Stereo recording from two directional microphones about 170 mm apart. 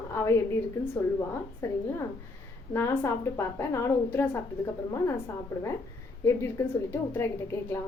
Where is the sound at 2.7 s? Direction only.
10° left (ahead or behind).